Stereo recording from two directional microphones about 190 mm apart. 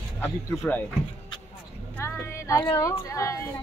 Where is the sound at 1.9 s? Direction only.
15° left (ahead or behind).